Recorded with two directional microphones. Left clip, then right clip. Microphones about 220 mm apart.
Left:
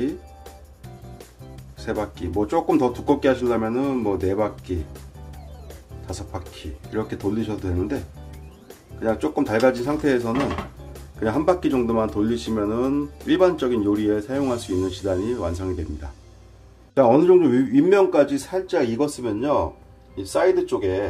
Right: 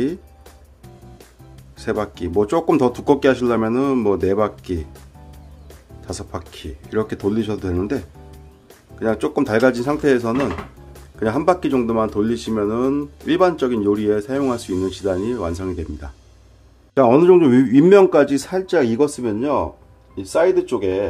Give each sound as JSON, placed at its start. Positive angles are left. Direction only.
{"t": 1.8, "sound": "speech", "side_deg": -35}
{"t": 6.0, "sound": "speech", "side_deg": -35}
{"t": 8.0, "sound": "music", "side_deg": 0}
{"t": 9.0, "sound": "speech", "side_deg": -35}